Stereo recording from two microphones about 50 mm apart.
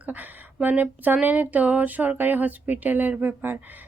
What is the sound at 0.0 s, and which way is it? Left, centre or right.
Speech, right.